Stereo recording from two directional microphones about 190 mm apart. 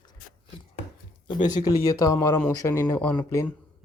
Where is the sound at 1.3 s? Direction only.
20° left (ahead or behind).